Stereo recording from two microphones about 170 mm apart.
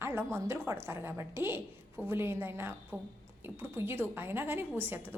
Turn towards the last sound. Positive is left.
turn(degrees=-10)  # may be behind; listen again after turning